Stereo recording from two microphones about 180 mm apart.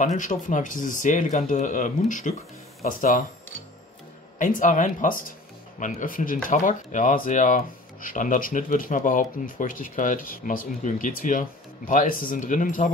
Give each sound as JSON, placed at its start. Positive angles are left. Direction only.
{"t": 0.0, "sound": "speech", "side_deg": 45}
{"t": 4.4, "sound": "speech", "side_deg": 45}